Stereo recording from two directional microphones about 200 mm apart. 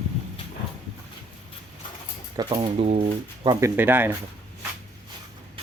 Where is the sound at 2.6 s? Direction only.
30° right (ahead or behind).